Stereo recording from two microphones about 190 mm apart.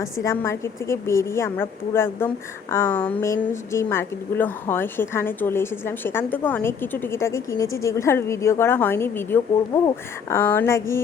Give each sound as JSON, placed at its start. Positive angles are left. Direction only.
{"t": 0.0, "sound": "a woman's voice", "side_deg": 15}